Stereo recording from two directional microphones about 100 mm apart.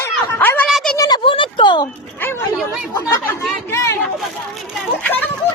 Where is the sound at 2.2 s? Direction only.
25° left (ahead or behind).